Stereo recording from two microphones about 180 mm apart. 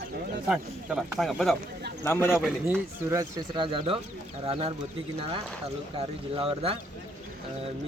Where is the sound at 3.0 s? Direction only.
15° right (ahead or behind).